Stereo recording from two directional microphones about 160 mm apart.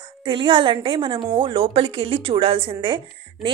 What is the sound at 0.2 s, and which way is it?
A woman's voice, 30° right (ahead or behind).